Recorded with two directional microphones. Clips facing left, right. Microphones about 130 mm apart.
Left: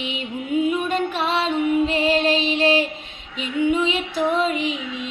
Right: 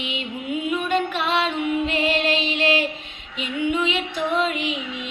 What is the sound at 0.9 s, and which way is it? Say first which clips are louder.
Music: even; 35° left (ahead or behind).